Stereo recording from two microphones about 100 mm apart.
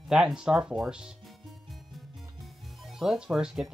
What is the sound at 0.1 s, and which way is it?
Speech, 5° right (ahead or behind).